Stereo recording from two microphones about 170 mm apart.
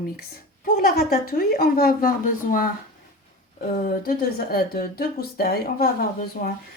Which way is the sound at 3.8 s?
60° left (ahead or behind).